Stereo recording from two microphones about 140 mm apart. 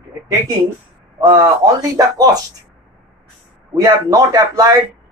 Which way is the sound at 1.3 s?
25° right (ahead or behind).